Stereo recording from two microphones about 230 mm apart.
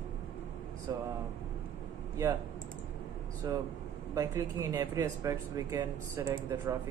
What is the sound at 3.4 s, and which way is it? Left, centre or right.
Speech, centre.